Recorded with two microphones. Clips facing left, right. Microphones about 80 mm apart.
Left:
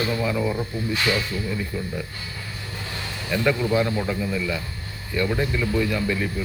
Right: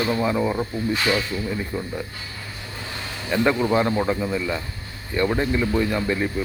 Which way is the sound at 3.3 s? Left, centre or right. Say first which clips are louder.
Right 2 dB; right.